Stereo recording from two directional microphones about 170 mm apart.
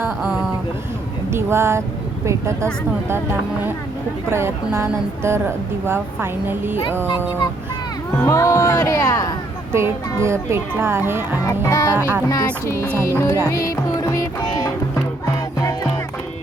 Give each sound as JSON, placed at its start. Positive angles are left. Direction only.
{"t": 0.2, "sound": "speech", "side_deg": -5}
{"t": 1.3, "sound": "a woman's voice", "side_deg": -15}
{"t": 4.3, "sound": "a woman's voice", "side_deg": -15}
{"t": 8.2, "sound": "speech", "side_deg": 20}
{"t": 9.7, "sound": "a woman's voice", "side_deg": -15}
{"t": 11.4, "sound": "speech", "side_deg": 20}
{"t": 11.9, "sound": "a woman's voice", "side_deg": -10}
{"t": 12.3, "sound": "speech", "side_deg": 20}
{"t": 13.5, "sound": "music", "side_deg": 20}